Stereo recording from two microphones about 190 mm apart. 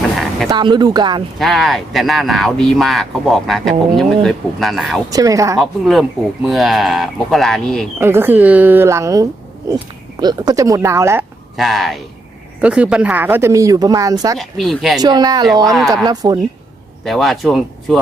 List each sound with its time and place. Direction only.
0.5 s speech: 25° right (ahead or behind)
1.4 s speech: centre (ahead or behind)
5.1 s speech: 20° right (ahead or behind)
5.5 s speech: centre (ahead or behind)
7.9 s speech: 10° right (ahead or behind)
11.5 s speech: centre (ahead or behind); by 14.3 s 20° right (ahead or behind)
14.3 s speech: centre (ahead or behind)
15.0 s speech: 20° right (ahead or behind)
17.0 s speech: centre (ahead or behind)